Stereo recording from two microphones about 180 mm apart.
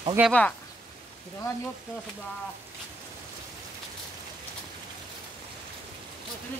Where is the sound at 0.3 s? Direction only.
10° left (ahead or behind).